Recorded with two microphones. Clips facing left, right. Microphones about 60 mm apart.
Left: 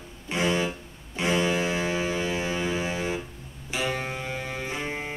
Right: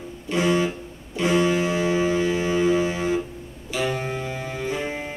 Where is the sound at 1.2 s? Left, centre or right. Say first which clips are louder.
Right 4 dB; left.